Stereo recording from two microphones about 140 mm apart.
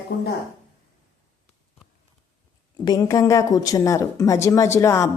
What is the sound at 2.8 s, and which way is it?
Speech, 25° left (ahead or behind).